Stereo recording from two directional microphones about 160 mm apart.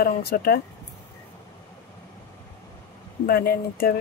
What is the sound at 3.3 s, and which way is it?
Speech, 70° left (ahead or behind).